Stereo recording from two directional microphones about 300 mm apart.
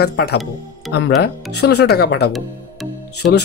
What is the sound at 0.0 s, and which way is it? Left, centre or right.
Speech, left.